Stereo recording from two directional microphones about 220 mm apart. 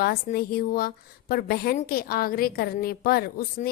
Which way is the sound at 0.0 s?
45° left (ahead or behind).